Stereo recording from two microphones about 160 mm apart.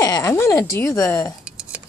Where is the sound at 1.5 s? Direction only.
5° right (ahead or behind).